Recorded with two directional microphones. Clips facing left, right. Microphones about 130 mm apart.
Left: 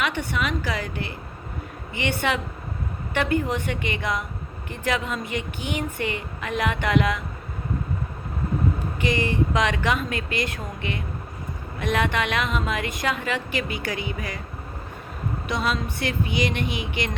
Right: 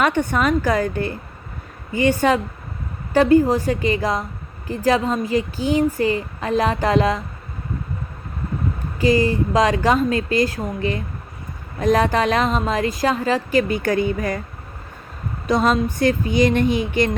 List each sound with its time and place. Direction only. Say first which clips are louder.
0.0 s a woman's voice: right 8 dB; 50° right (ahead or behind); by 7.2 s 30° right (ahead or behind)
9.0 s a sound: right 9 dB; 35° right (ahead or behind)
9.5 s a woman's voice: right 6 dB; 30° right (ahead or behind); by 14.4 s 50° right (ahead or behind)
15.5 s speech: right 9 dB; 45° right (ahead or behind)